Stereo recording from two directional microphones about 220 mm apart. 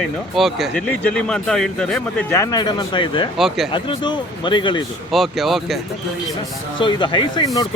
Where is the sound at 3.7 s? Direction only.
20° left (ahead or behind).